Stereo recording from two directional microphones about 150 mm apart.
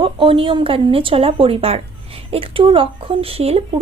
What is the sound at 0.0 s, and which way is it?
Speech, 35° right (ahead or behind).